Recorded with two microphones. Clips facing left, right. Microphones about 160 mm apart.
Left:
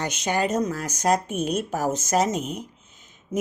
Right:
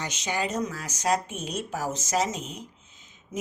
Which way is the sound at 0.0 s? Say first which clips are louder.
Left 5 dB; 55° left (ahead or behind).